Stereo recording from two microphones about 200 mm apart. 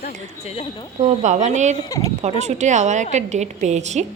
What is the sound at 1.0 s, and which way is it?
A woman's voice, 35° right (ahead or behind).